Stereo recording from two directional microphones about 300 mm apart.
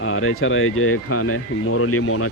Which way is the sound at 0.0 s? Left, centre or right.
Left.